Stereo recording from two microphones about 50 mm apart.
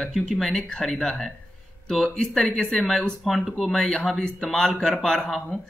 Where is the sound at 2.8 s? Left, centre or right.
Centre.